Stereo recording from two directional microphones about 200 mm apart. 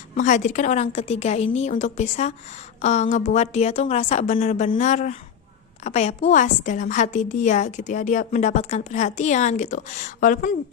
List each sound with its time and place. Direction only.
0.1 s a woman's voice: 40° left (ahead or behind)